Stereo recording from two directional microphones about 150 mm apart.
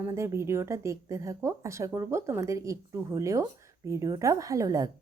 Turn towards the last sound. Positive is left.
turn(degrees=-25)  # may be behind; listen again after turning